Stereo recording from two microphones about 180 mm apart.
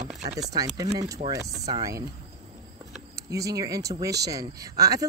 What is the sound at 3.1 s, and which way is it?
Speech, 20° right (ahead or behind).